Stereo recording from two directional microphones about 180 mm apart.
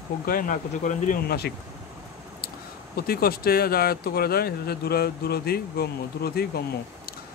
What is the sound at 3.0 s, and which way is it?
Speech, 55° left (ahead or behind).